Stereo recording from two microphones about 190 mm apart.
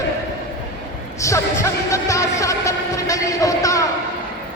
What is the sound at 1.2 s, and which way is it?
Speech, 15° left (ahead or behind).